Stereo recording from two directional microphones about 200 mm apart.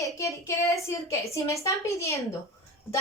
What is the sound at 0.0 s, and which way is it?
A woman's voice, 15° left (ahead or behind).